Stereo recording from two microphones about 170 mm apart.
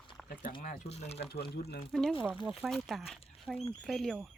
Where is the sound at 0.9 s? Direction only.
40° left (ahead or behind).